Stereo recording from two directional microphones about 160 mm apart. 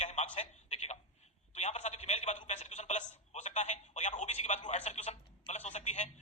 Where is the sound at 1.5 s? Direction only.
45° left (ahead or behind).